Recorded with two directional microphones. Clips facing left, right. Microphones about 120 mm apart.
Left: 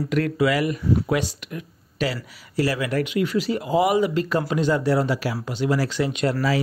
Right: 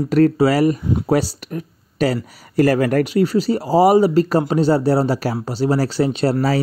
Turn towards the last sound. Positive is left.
turn(degrees=-35)  # may be behind; listen again after turning